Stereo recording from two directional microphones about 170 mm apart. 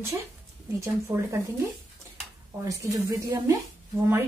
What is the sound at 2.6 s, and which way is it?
Speech, 20° right (ahead or behind).